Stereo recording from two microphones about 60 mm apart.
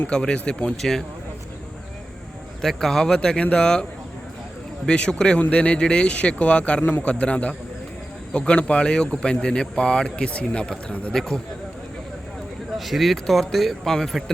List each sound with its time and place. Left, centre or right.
0.1 s speech: centre
2.6 s speech: centre
4.9 s speech: centre
11.1 s speech: centre
12.7 s speech: centre